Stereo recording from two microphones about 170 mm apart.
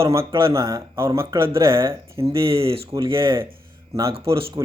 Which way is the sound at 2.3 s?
30° right (ahead or behind).